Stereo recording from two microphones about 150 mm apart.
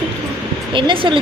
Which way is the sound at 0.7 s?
35° right (ahead or behind).